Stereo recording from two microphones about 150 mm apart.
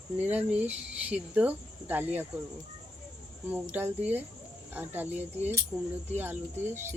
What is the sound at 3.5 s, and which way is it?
Speech, 10° right (ahead or behind).